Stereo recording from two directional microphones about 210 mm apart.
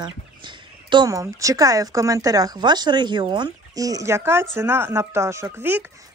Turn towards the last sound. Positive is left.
turn(degrees=-10)  # may be behind; listen again after turning